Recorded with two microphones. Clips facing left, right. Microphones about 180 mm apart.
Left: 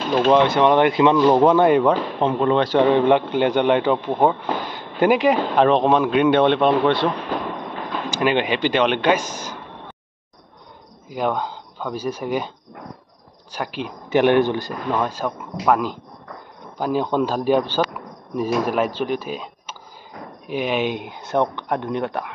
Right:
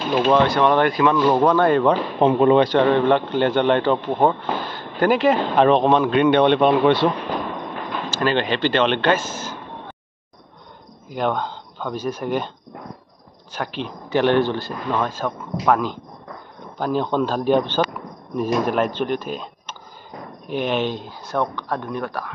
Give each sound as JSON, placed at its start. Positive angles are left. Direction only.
{"t": 0.3, "sound": "speech", "side_deg": 20}
{"t": 2.1, "sound": "speech", "side_deg": -15}
{"t": 2.8, "sound": "speech", "side_deg": 15}
{"t": 5.6, "sound": "speech", "side_deg": 0}
{"t": 8.1, "sound": "speech", "side_deg": 15}
{"t": 11.1, "sound": "speech", "side_deg": 5}
{"t": 13.5, "sound": "speech", "side_deg": 10}